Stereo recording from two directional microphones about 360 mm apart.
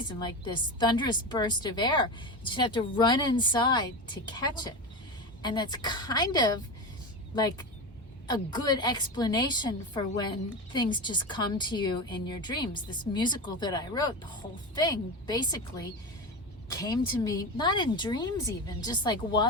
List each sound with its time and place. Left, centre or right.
0.1 s a woman's voice: centre
8.3 s a woman's voice: centre